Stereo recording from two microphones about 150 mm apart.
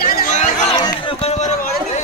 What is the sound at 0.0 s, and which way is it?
Chatter, 70° left (ahead or behind).